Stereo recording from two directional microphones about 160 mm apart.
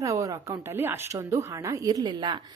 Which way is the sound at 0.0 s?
20° right (ahead or behind).